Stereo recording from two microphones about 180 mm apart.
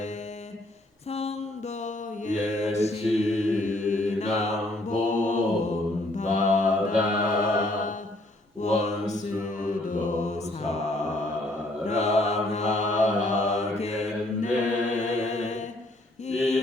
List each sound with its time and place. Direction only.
1.1 s mantra: 35° left (ahead or behind)